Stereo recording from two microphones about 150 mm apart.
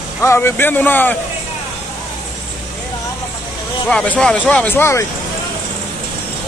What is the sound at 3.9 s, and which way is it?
Speech, 5° left (ahead or behind).